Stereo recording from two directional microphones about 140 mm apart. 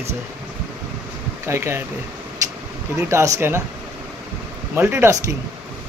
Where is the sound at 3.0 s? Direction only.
20° right (ahead or behind).